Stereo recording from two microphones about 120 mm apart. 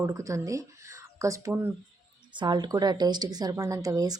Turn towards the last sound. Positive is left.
turn(degrees=-30)  # may be behind; listen again after turning